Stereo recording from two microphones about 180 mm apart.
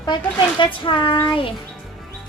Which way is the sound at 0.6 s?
30° left (ahead or behind).